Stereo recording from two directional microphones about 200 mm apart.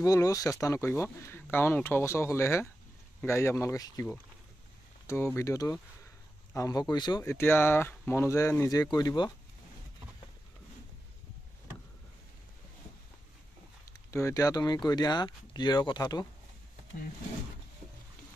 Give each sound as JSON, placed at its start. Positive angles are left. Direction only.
{"t": 0.0, "sound": "speech", "side_deg": 15}
{"t": 14.1, "sound": "speech", "side_deg": 15}